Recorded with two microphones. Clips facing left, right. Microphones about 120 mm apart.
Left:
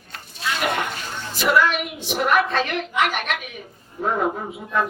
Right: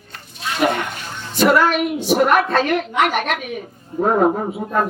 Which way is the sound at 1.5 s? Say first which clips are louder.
Right 1 dB; 45° right (ahead or behind).